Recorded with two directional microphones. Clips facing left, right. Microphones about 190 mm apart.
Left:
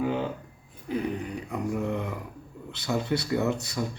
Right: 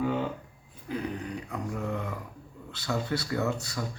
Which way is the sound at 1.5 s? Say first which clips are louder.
Left 6 dB; 15° left (ahead or behind).